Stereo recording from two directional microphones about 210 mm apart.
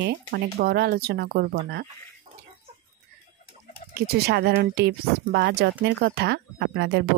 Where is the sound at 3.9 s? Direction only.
50° right (ahead or behind).